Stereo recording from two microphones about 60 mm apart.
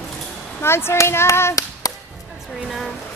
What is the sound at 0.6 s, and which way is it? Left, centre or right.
Speech, left.